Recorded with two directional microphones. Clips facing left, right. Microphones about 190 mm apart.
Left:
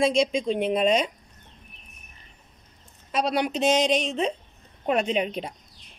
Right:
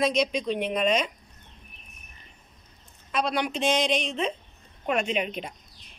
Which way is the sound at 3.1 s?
40° left (ahead or behind).